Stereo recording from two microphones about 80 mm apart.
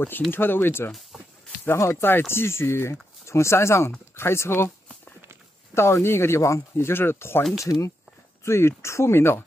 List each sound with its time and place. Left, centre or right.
0.3 s speech: left
1.1 s a sound: centre
1.6 s speech: left
5.8 s speech: left
7.7 s speech: left
8.5 s speech: left